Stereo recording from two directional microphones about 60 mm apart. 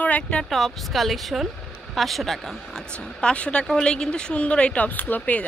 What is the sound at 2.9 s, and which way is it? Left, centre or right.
Speech, centre.